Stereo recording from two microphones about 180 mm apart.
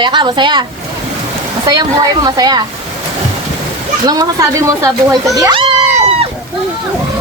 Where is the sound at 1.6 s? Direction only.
20° right (ahead or behind).